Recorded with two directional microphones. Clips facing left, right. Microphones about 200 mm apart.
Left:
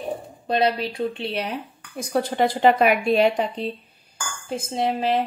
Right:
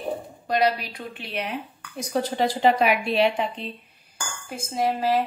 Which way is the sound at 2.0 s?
55° left (ahead or behind).